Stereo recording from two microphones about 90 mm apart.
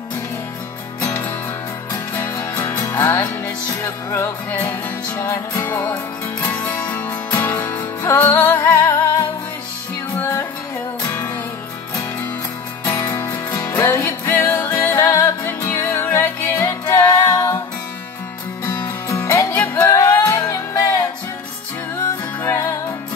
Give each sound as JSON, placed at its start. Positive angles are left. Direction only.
{"t": 2.7, "sound": "music", "side_deg": 30}
{"t": 13.1, "sound": "music", "side_deg": 35}
{"t": 19.0, "sound": "music", "side_deg": 35}
{"t": 19.5, "sound": "music", "side_deg": 25}
{"t": 22.4, "sound": "music", "side_deg": 30}